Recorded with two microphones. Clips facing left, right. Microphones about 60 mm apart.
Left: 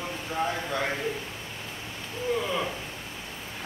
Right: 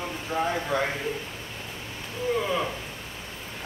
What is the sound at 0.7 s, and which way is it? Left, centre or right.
Speech, centre.